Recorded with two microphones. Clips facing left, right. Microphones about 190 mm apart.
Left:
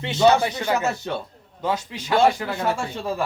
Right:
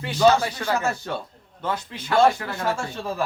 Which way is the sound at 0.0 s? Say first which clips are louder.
Left 1 dB; 25° left (ahead or behind).